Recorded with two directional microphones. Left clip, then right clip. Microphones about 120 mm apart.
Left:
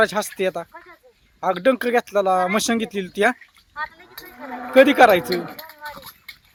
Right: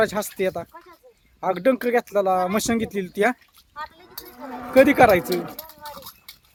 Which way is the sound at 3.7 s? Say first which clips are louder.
Left 5 dB; 30° right (ahead or behind).